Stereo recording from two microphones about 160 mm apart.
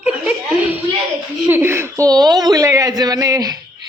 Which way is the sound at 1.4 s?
15° right (ahead or behind).